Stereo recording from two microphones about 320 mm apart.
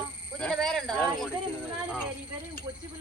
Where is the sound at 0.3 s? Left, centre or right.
Centre.